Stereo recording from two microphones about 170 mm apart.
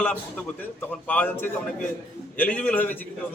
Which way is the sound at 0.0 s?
10° left (ahead or behind).